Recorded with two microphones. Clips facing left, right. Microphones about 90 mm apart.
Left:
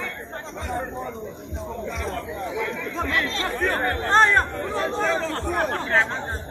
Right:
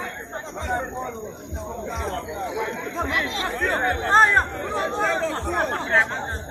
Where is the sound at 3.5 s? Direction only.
Centre (ahead or behind).